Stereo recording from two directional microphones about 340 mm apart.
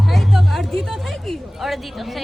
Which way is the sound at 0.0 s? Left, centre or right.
Centre.